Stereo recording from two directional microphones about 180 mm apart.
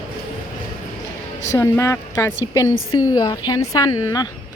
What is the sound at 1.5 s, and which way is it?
A woman's voice, 15° left (ahead or behind).